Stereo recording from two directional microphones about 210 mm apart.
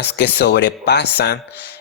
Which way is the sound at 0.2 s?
50° left (ahead or behind).